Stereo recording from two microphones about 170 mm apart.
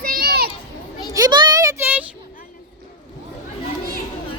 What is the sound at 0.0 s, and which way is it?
Children playing, 60° right (ahead or behind).